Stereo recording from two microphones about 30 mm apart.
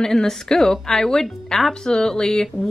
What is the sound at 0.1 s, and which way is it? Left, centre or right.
A woman's voice, centre.